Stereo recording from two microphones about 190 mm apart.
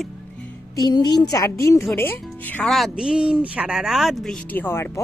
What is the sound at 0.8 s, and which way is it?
Speech, 20° left (ahead or behind).